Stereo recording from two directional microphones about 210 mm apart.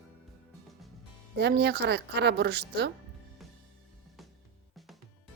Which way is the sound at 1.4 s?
55° right (ahead or behind).